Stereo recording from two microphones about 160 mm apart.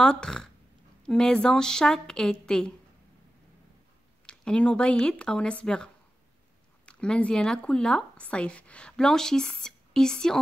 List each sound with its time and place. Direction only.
0.0 s speech: 5° left (ahead or behind)
4.3 s speech: 5° left (ahead or behind)
6.9 s speech: 5° left (ahead or behind)